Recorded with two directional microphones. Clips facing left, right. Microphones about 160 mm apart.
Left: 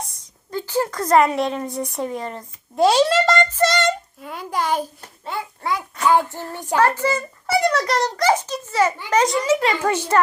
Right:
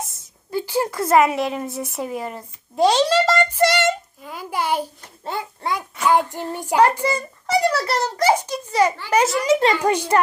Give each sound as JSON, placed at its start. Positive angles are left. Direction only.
{"t": 0.0, "sound": "a woman's voice", "side_deg": -10}
{"t": 2.8, "sound": "speech", "side_deg": 5}
{"t": 3.6, "sound": "a sound", "side_deg": -10}
{"t": 6.1, "sound": "child singing", "side_deg": -15}
{"t": 7.4, "sound": "a sound", "side_deg": 0}
{"t": 9.0, "sound": "child singing", "side_deg": -5}